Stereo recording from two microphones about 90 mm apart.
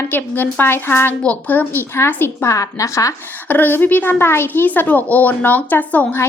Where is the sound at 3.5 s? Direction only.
20° left (ahead or behind).